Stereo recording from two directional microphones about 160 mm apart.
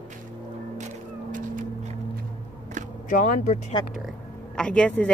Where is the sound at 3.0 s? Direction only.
55° left (ahead or behind).